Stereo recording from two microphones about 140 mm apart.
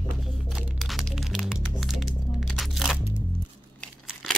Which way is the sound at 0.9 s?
Centre (ahead or behind).